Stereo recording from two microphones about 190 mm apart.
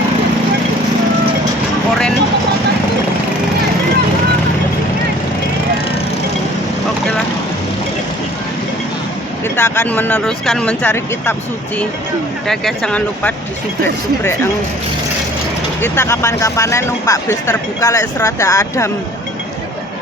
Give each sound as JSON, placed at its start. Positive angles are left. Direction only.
{"t": 9.6, "sound": "speech", "side_deg": 10}
{"t": 12.5, "sound": "speech", "side_deg": 5}
{"t": 15.8, "sound": "speech", "side_deg": 15}